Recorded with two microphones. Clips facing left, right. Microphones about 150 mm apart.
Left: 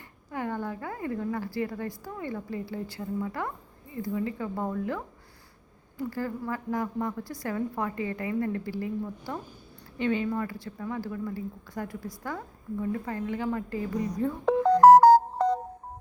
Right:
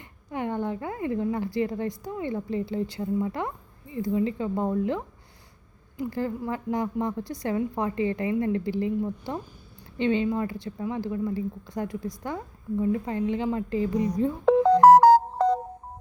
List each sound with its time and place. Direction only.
0.3 s a woman's voice: 20° right (ahead or behind)
14.8 s music: 90° right